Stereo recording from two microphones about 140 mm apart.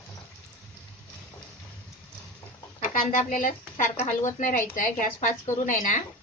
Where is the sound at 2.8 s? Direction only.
65° left (ahead or behind).